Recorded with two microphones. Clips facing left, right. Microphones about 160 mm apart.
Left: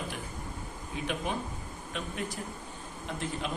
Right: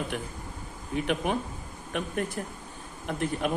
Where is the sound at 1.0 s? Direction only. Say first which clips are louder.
Right 4 dB; 60° right (ahead or behind).